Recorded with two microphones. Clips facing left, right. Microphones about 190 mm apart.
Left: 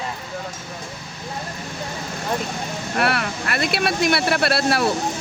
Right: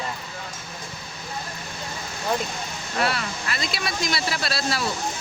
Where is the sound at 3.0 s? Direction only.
60° left (ahead or behind).